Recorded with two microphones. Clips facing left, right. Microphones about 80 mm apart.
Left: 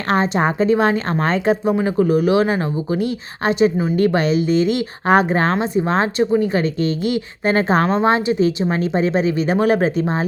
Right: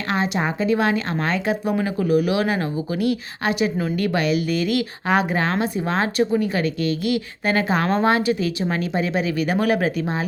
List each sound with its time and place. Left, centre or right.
0.1 s a woman's voice: left
5.0 s a woman's voice: left